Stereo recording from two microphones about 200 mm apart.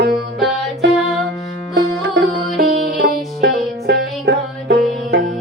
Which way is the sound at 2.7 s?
50° right (ahead or behind).